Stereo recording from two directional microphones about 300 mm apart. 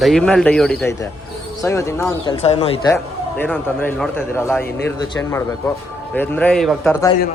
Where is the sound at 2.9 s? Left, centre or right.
Centre.